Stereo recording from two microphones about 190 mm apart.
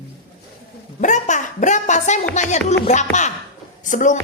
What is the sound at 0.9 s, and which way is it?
A woman's voice, 40° left (ahead or behind).